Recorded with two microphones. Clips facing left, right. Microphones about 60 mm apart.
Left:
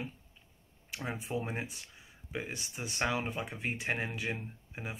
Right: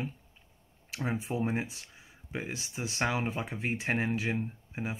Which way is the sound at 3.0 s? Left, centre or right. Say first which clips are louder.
Right 2 dB; right.